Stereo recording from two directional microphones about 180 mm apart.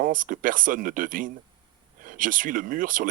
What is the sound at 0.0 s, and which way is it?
Speech, 50° right (ahead or behind).